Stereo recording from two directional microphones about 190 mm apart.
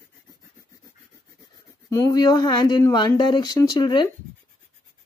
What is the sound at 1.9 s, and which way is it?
A woman's voice, 15° left (ahead or behind).